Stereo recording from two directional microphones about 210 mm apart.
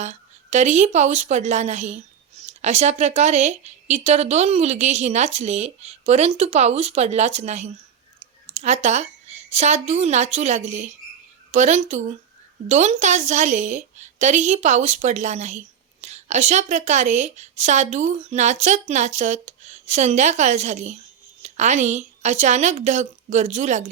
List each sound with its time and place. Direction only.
0.0 s a woman's voice: 35° right (ahead or behind)